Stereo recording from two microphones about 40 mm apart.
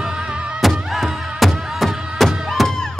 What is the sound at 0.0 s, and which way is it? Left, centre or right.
Music, centre.